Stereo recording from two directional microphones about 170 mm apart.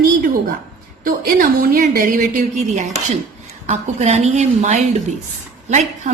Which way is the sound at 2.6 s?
45° right (ahead or behind).